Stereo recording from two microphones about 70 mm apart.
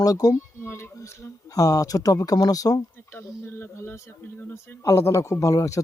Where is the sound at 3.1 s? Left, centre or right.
Left.